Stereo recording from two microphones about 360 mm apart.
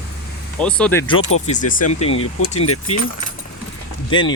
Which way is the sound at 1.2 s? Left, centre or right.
Left.